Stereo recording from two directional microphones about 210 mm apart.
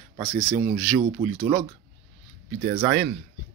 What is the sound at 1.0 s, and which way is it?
Speech, 30° right (ahead or behind).